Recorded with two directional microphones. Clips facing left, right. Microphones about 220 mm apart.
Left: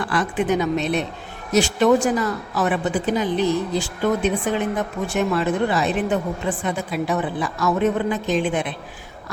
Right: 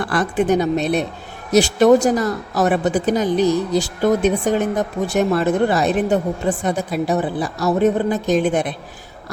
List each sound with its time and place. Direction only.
0.0 s a woman's voice: 40° right (ahead or behind)